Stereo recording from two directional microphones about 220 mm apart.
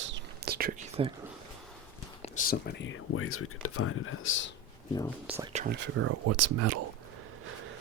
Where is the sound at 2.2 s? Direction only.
35° left (ahead or behind); by 4.5 s 60° left (ahead or behind).